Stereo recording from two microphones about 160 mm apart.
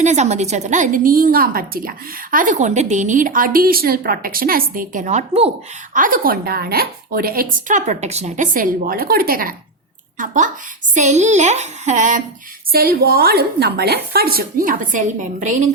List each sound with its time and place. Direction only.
0.0 s a woman's voice: 45° right (ahead or behind)
5.9 s speech: 60° right (ahead or behind)
10.2 s a woman's voice: 50° right (ahead or behind)
12.7 s a woman's voice: 70° right (ahead or behind); by 15.7 s 50° right (ahead or behind)